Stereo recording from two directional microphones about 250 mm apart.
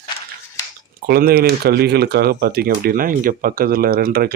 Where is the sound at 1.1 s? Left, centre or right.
Right.